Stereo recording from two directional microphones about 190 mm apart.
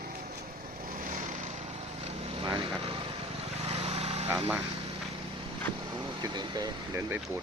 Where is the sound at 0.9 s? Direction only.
45° right (ahead or behind).